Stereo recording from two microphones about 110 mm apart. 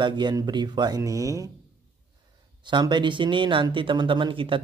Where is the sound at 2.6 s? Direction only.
45° right (ahead or behind).